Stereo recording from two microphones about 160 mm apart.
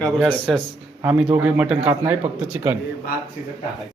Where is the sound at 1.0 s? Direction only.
10° right (ahead or behind).